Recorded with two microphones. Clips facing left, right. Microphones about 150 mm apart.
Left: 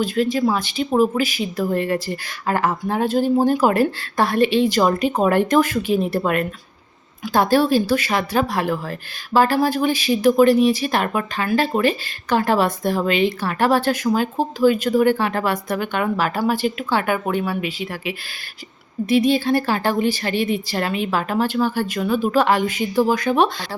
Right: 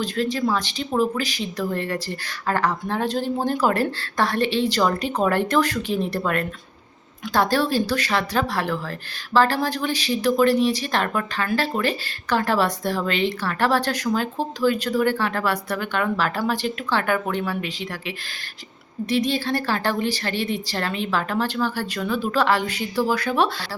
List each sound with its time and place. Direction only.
0.0 s speech: 10° left (ahead or behind)